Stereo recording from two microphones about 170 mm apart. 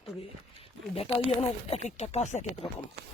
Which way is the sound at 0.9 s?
35° left (ahead or behind).